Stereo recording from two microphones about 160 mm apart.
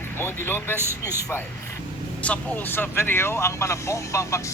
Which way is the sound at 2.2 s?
10° left (ahead or behind).